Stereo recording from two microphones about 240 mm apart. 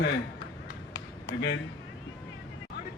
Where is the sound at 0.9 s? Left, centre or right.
Left.